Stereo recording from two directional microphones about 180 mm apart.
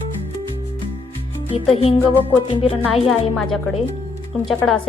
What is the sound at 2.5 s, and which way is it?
Speech, 30° left (ahead or behind).